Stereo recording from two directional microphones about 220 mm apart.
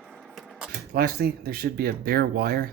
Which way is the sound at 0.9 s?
45° right (ahead or behind).